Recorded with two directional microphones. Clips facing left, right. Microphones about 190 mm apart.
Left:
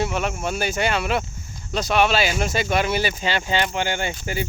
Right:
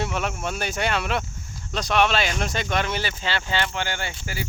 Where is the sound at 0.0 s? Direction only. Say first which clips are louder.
Left 3 dB; centre (ahead or behind).